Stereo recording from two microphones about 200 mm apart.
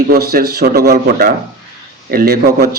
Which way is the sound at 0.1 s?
50° right (ahead or behind).